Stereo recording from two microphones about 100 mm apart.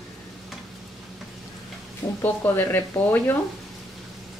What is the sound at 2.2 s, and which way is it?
Speech, 20° left (ahead or behind).